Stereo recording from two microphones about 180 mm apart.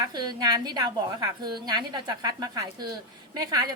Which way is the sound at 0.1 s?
25° right (ahead or behind).